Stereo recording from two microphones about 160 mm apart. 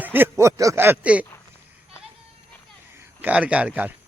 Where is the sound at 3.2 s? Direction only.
10° right (ahead or behind).